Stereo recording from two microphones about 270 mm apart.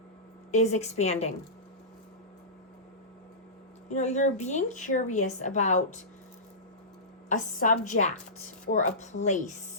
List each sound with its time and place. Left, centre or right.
0.5 s a woman's voice: left
3.8 s a woman's voice: left
7.3 s a woman's voice: left